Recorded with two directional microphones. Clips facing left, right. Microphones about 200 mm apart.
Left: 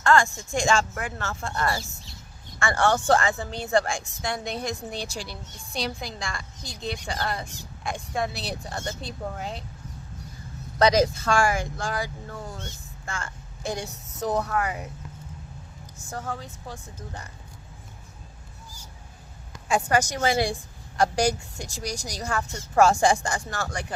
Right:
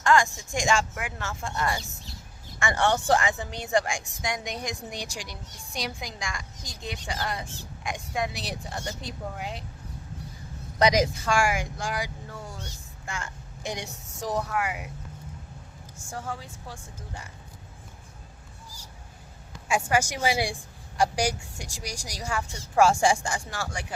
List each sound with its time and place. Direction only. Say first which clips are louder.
0.0 s a woman's voice: left 1 dB; 15° right (ahead or behind)
1.8 s speech: even; centre (ahead or behind)
2.6 s a woman's voice: left 2 dB; 15° right (ahead or behind)
7.4 s speech: even; 15° left (ahead or behind)
7.9 s a woman's voice: left 2 dB; 15° right (ahead or behind)
10.8 s a woman's voice: left 2 dB; 15° right (ahead or behind)
16.0 s a woman's voice: left 2 dB; 10° right (ahead or behind)
19.6 s a woman's voice: left 2 dB; 10° right (ahead or behind)